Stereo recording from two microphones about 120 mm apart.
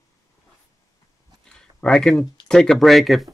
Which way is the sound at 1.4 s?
5° left (ahead or behind).